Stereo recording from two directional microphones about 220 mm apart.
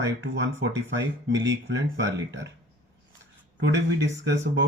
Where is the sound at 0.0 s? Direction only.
55° right (ahead or behind).